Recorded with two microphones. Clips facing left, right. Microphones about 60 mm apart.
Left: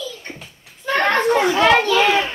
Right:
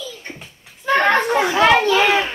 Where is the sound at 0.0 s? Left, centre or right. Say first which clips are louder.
Left 1 dB; centre.